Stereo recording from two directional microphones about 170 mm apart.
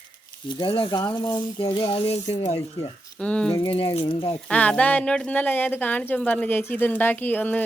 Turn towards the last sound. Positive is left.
turn(degrees=10)  # may be behind; listen again after turning